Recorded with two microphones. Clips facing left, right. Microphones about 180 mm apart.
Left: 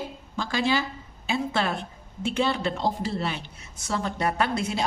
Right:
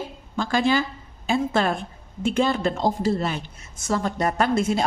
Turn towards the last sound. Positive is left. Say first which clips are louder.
# right 5 dB
turn(degrees=-45)  # may be behind; listen again after turning